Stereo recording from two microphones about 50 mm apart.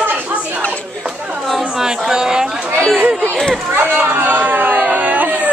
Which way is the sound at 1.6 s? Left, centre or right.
Centre.